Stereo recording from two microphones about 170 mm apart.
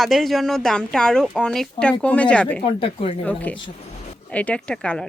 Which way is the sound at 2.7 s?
35° left (ahead or behind).